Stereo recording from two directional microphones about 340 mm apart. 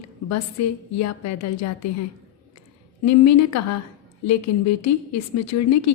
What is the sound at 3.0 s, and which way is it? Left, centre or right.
A woman's voice, left.